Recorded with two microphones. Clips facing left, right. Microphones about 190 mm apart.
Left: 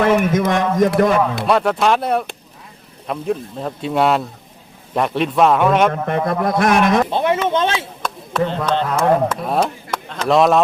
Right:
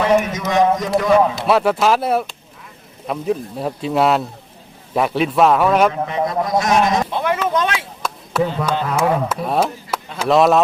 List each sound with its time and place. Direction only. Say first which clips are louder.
0.0 s a man's voice: left 2 dB; 55° left (ahead or behind)
1.5 s speech: right 1 dB; 5° right (ahead or behind)
5.9 s speech: left 1 dB; 55° left (ahead or behind)
7.1 s speech: left 2 dB; 25° left (ahead or behind)
8.0 s speech: right 2 dB; 5° right (ahead or behind)